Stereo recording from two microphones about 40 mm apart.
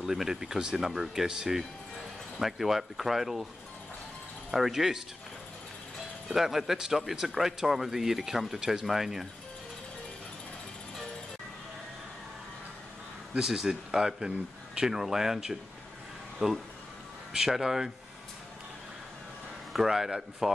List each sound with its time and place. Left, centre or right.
0.0 s speech: centre
2.3 s speech: centre
4.5 s speech: centre
6.2 s speech: centre
13.4 s speech: centre
19.7 s speech: centre